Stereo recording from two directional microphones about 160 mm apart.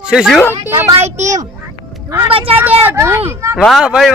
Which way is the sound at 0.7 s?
15° right (ahead or behind).